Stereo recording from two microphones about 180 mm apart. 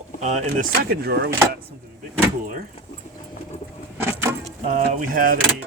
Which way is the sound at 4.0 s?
15° right (ahead or behind).